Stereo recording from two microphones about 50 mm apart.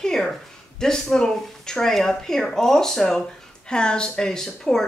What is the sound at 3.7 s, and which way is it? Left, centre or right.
Speech, centre.